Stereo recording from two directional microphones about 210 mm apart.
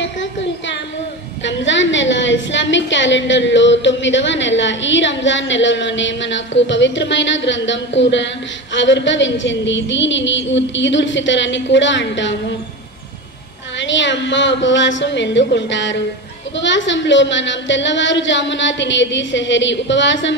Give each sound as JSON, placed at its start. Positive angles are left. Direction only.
{"t": 0.0, "sound": "a sound", "side_deg": 60}
{"t": 1.4, "sound": "a woman's voice", "side_deg": 60}
{"t": 13.7, "sound": "a woman's voice", "side_deg": 60}